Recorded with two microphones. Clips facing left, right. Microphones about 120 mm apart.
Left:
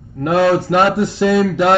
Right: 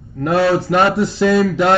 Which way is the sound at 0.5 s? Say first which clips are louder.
Left 1 dB; centre (ahead or behind).